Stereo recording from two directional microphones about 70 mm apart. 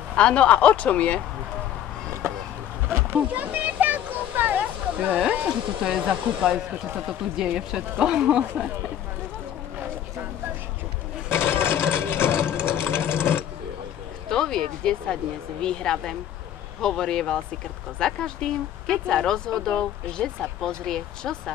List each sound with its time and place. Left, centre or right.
0.1 s speech: centre
2.9 s speech: right
3.3 s a sound: right
5.9 s hair dryer: centre
11.2 s sewing machine: left
14.3 s speech: centre